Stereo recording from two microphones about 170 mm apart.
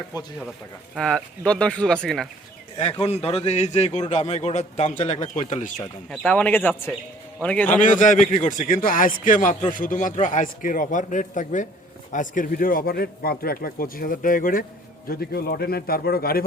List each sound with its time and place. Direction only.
0.9 s speech: 5° left (ahead or behind)
3.1 s a man's voice: 35° left (ahead or behind)
6.1 s speech: 10° left (ahead or behind)
7.7 s a man's voice: 50° left (ahead or behind)